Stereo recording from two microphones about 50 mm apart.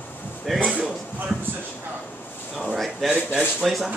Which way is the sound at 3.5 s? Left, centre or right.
Centre.